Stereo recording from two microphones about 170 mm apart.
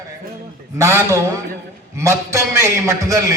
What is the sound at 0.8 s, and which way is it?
A man's voice, 15° right (ahead or behind).